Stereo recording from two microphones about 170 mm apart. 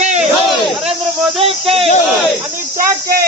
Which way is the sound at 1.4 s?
35° right (ahead or behind).